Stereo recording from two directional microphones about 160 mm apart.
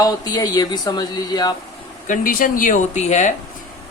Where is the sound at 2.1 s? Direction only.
60° left (ahead or behind).